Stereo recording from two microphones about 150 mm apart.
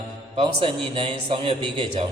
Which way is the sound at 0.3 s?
35° right (ahead or behind).